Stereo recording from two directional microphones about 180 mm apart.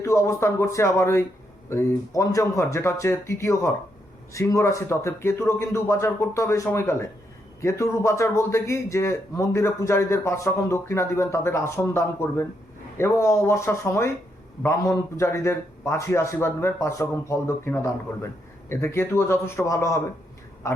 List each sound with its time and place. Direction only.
0.0 s a man's voice: 15° left (ahead or behind)